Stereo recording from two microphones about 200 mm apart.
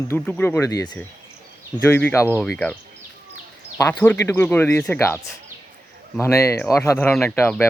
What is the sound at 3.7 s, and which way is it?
Speech, 15° left (ahead or behind).